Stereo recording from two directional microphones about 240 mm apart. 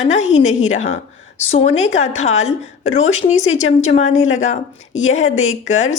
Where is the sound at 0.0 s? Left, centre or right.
Left.